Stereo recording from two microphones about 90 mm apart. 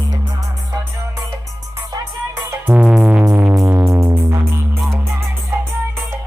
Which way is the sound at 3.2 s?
30° right (ahead or behind).